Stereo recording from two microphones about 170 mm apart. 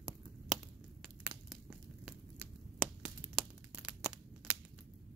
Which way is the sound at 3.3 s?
5° right (ahead or behind).